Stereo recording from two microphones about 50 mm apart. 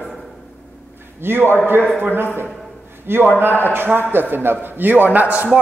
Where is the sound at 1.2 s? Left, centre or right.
Right.